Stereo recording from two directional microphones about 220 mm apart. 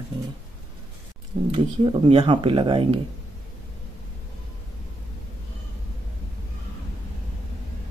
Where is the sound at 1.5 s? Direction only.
25° right (ahead or behind).